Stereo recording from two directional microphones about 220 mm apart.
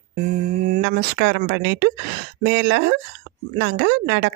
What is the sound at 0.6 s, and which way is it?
Speech, 40° right (ahead or behind).